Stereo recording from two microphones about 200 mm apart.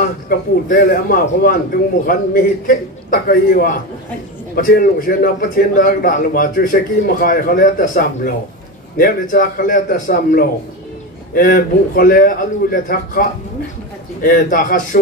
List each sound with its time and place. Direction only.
0.0 s a man's voice: 50° left (ahead or behind)